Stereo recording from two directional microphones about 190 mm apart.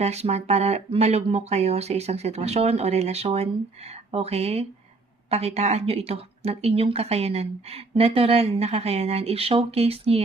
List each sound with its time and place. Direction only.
0.0 s speech: 35° right (ahead or behind)